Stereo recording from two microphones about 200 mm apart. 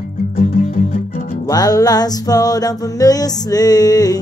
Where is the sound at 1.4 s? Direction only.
20° left (ahead or behind).